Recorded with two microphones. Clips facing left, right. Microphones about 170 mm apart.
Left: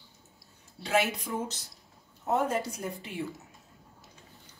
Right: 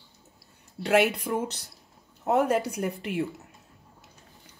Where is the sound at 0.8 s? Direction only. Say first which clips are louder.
Right 6 dB; 60° right (ahead or behind).